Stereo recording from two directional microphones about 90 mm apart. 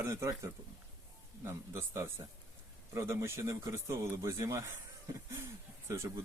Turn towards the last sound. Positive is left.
turn(degrees=-30)  # may be behind; listen again after turning